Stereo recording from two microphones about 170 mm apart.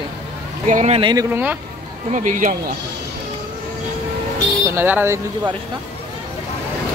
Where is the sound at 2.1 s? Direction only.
50° right (ahead or behind).